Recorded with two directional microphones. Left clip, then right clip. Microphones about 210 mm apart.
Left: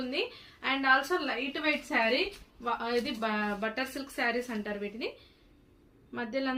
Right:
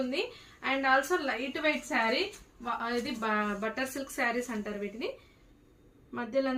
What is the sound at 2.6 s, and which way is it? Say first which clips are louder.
A woman's voice: left 2 dB; 20° right (ahead or behind).